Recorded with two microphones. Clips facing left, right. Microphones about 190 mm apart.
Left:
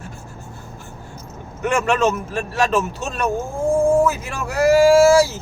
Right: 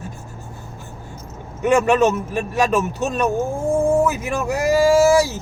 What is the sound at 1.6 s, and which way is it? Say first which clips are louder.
Speech: right 3 dB; 15° right (ahead or behind).